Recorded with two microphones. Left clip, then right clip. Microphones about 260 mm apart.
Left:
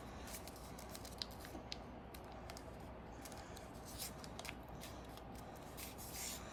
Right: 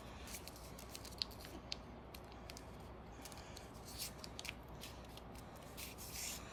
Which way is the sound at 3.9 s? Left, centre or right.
Left.